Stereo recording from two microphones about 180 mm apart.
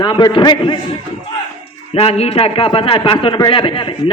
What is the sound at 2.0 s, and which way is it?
A man's voice, 35° left (ahead or behind).